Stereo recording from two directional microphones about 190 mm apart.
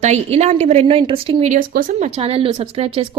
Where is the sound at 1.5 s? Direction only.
45° right (ahead or behind).